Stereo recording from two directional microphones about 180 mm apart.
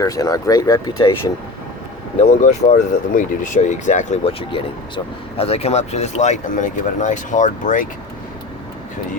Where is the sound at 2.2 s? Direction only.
40° left (ahead or behind).